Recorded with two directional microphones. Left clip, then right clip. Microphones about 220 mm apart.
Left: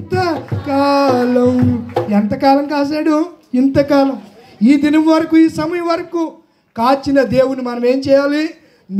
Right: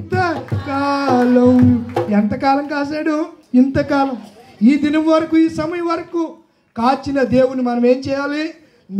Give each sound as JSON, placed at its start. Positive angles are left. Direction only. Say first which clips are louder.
{"t": 0.1, "sound": "music", "louder": "left 1 dB", "side_deg": 50}
{"t": 2.0, "sound": "speech", "louder": "left 4 dB", "side_deg": 50}